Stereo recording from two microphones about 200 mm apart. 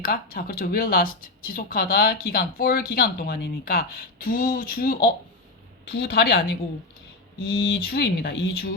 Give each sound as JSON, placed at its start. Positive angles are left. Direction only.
{"t": 0.0, "sound": "speech", "side_deg": 50}